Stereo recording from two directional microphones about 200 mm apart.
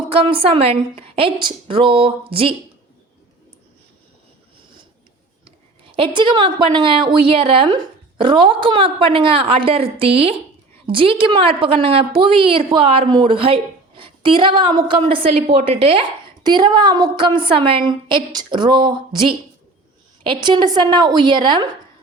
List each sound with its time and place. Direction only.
0.3 s a woman's voice: 25° right (ahead or behind)
5.5 s a woman's voice: 25° right (ahead or behind)